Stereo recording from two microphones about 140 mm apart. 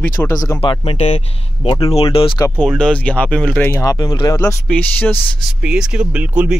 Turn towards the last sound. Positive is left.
turn(degrees=-10)  # may be behind; listen again after turning